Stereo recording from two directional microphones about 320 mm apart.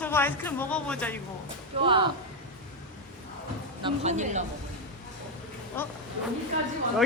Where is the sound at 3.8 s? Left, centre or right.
Right.